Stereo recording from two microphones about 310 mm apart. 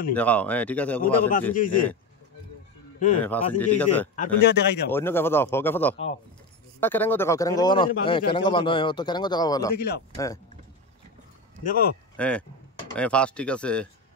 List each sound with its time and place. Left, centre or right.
0.1 s speech: centre
1.5 s speech: left
3.2 s speech: centre
4.1 s speech: left
4.9 s speech: centre
9.8 s speech: left
10.1 s speech: centre
11.6 s speech: left
12.2 s speech: centre